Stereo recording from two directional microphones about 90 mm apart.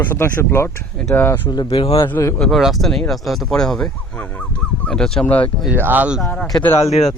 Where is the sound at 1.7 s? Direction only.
90° left.